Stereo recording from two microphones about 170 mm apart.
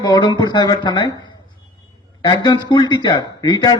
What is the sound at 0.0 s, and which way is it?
A man's voice, 25° left (ahead or behind).